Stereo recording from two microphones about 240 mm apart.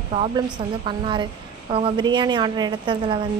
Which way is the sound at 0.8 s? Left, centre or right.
Centre.